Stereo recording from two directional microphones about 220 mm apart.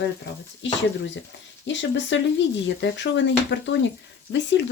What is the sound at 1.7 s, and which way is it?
Speech, 55° left (ahead or behind).